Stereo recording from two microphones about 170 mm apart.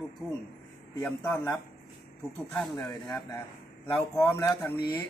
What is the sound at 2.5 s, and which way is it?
Speech, 5° left (ahead or behind).